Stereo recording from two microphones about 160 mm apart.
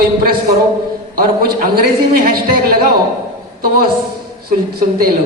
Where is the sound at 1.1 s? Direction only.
70° right (ahead or behind).